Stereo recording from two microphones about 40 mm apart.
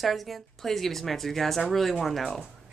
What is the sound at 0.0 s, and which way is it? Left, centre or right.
A woman's voice, centre.